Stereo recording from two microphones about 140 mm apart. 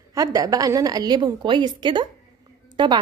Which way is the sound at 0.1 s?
25° right (ahead or behind).